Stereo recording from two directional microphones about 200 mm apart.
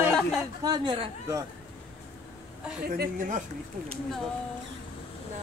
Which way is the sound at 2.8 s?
45° right (ahead or behind).